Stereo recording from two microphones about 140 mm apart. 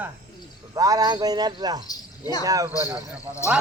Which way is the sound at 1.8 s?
25° left (ahead or behind).